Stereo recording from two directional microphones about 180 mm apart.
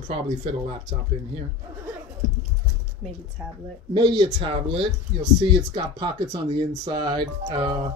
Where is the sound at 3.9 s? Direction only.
25° right (ahead or behind).